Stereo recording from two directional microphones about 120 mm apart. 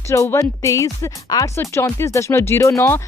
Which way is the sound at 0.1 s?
25° left (ahead or behind).